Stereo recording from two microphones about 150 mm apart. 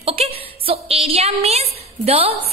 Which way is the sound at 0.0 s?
40° right (ahead or behind).